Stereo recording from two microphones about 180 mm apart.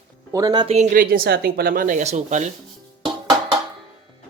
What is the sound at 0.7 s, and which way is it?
Speech, 45° right (ahead or behind).